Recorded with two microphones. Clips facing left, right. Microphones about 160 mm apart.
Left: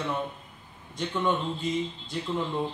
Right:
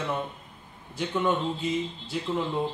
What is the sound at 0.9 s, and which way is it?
A man's voice, 5° right (ahead or behind).